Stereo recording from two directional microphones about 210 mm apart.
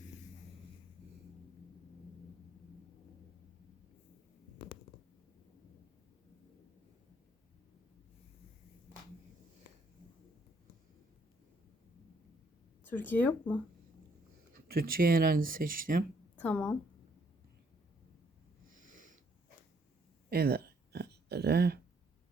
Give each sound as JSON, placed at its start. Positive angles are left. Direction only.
{"t": 4.5, "sound": "a sound", "side_deg": 45}
{"t": 12.8, "sound": "speech", "side_deg": 10}
{"t": 14.7, "sound": "speech", "side_deg": -45}
{"t": 16.4, "sound": "a woman's voice", "side_deg": 5}
{"t": 18.9, "sound": "sniff", "side_deg": -40}
{"t": 20.3, "sound": "a sound", "side_deg": -50}